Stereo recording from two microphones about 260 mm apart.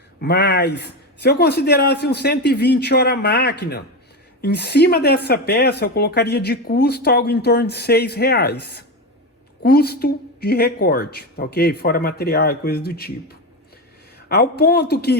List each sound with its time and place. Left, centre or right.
0.2 s speech: left
14.3 s speech: left